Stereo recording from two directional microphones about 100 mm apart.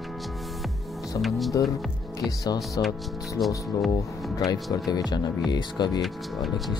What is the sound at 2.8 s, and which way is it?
Speech, 40° left (ahead or behind).